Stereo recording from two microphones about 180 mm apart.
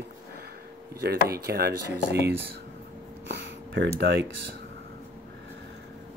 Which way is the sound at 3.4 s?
85° right.